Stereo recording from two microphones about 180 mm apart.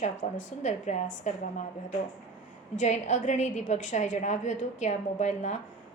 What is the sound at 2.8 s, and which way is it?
A woman's voice, 40° left (ahead or behind).